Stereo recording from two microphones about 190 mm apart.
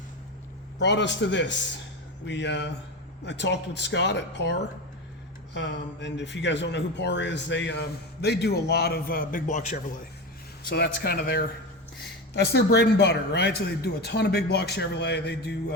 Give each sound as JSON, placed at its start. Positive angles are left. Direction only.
{"t": 0.8, "sound": "a man's voice", "side_deg": 65}
{"t": 10.7, "sound": "speech", "side_deg": 55}